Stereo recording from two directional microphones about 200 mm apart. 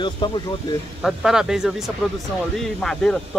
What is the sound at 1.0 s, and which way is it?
Speech, centre (ahead or behind).